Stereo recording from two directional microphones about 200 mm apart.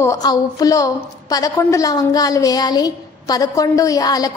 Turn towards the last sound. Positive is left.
turn(degrees=20)  # may be behind; listen again after turning